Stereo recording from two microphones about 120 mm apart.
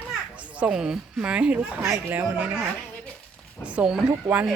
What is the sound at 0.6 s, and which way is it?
Speech, 5° right (ahead or behind).